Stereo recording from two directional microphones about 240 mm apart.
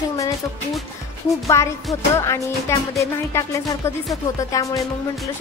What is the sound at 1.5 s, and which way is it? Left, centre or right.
A man's voice, centre.